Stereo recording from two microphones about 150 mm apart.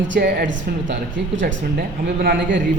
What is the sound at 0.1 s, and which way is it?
Speech, 90° right.